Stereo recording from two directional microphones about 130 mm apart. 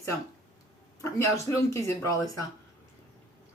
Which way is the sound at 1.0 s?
20° left (ahead or behind).